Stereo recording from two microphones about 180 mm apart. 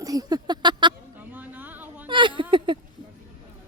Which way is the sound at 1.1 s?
10° right (ahead or behind).